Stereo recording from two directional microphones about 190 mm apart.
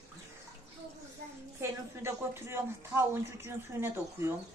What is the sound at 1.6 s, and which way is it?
Speech, 15° right (ahead or behind).